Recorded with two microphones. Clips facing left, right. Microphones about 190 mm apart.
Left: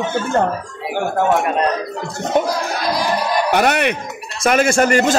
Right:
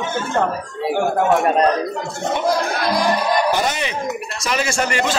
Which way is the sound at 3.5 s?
65° left (ahead or behind).